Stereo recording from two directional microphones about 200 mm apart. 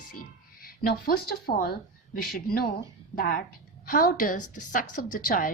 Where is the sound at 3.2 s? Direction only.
45° left (ahead or behind).